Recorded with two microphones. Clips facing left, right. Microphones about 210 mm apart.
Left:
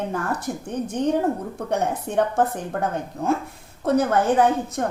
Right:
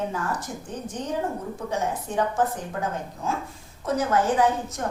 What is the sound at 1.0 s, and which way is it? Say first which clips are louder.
A woman's voice: left 7 dB; 60° left (ahead or behind).